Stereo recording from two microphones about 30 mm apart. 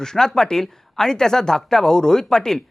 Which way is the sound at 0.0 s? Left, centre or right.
Centre.